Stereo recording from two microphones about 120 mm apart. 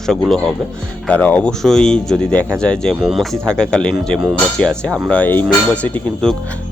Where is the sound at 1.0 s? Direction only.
10° left (ahead or behind).